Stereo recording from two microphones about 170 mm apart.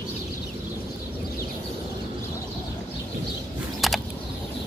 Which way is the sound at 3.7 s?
Centre (ahead or behind).